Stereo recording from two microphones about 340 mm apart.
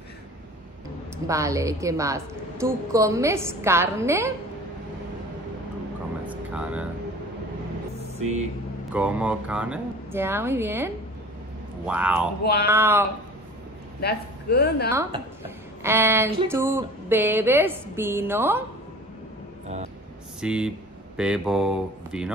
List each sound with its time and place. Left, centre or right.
1.1 s a woman's voice: centre
6.2 s air conditioning: centre
8.9 s a woman's voice: centre
14.0 s a man's voice: left
14.9 s a woman's voice: centre
20.3 s speech: centre